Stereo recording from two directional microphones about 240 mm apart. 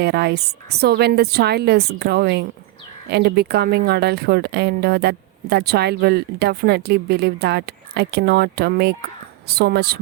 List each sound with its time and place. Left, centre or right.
0.0 s a woman's voice: right